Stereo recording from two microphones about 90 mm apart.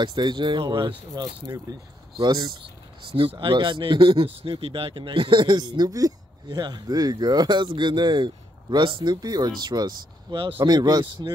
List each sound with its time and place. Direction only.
0.0 s speech: 55° right (ahead or behind)
1.7 s speech: 45° right (ahead or behind)
2.1 s speech: 55° right (ahead or behind)
3.3 s speech: 65° right (ahead or behind)